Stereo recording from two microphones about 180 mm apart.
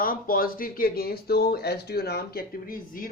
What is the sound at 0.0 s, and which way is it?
Speech, 55° left (ahead or behind).